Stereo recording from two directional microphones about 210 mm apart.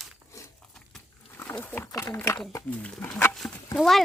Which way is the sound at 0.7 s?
5° left (ahead or behind).